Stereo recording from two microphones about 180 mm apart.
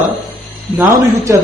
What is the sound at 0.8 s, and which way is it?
Speech, 15° right (ahead or behind).